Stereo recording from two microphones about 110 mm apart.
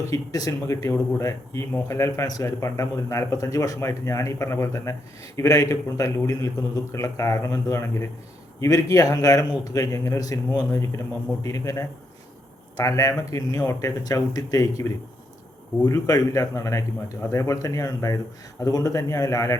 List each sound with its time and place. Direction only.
0.0 s a man's voice: 30° left (ahead or behind)